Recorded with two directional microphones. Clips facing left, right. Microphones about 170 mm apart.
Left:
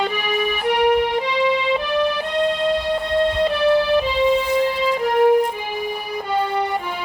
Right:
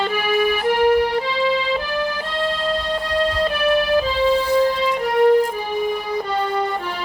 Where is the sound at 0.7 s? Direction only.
20° left (ahead or behind).